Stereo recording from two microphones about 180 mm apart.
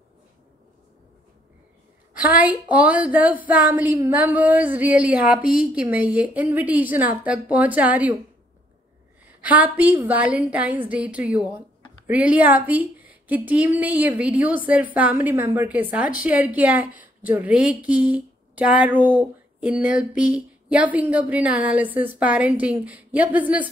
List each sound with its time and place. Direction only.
2.1 s a woman's voice: 10° right (ahead or behind)
9.4 s a woman's voice: 10° right (ahead or behind)